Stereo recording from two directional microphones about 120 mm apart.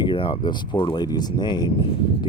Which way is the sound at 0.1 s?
45° left (ahead or behind).